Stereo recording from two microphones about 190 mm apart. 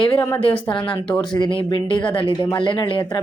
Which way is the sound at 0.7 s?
25° left (ahead or behind).